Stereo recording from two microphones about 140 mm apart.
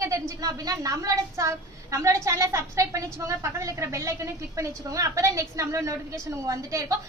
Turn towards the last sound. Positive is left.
turn(degrees=-20)  # may be behind; listen again after turning